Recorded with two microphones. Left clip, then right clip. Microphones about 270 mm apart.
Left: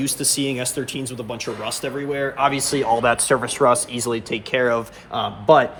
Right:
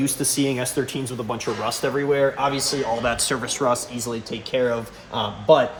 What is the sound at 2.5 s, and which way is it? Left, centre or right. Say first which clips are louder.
Speech: left 4 dB; left.